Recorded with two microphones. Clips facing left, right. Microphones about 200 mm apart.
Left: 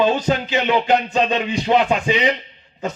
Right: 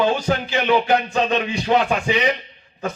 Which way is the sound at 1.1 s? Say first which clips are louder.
Left 1 dB; 15° left (ahead or behind).